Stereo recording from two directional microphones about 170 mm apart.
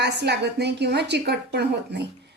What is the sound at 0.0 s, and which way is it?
A woman's voice, 85° right.